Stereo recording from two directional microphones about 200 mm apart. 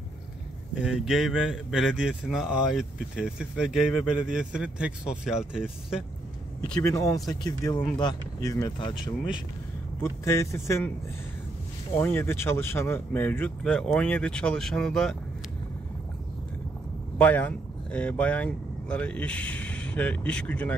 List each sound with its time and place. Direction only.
0.7 s a man's voice: 5° right (ahead or behind)
6.7 s speech: 15° left (ahead or behind)
9.9 s speech: 15° left (ahead or behind)
12.0 s speech: 10° left (ahead or behind)
17.2 s speech: 10° left (ahead or behind)